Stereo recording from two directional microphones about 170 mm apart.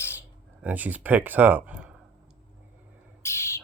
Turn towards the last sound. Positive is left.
turn(degrees=15)  # may be behind; listen again after turning